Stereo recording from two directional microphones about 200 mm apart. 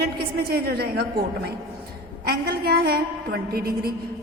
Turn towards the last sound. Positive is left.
turn(degrees=-50)  # may be behind; listen again after turning